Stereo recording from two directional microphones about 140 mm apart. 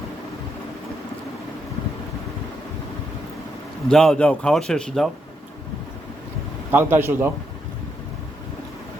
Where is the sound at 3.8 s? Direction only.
5° left (ahead or behind).